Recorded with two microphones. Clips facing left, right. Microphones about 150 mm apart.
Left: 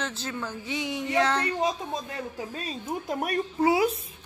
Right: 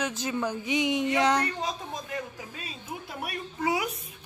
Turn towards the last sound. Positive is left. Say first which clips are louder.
# left 6 dB
turn(degrees=30)  # may be behind; listen again after turning